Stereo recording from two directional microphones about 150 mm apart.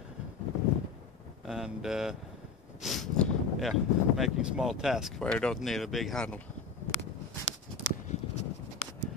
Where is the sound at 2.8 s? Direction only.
Centre (ahead or behind).